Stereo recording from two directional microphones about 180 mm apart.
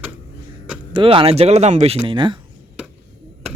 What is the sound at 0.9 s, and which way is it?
Speech, 30° right (ahead or behind).